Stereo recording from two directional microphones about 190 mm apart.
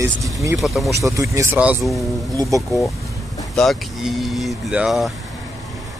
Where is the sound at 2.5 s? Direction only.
15° right (ahead or behind).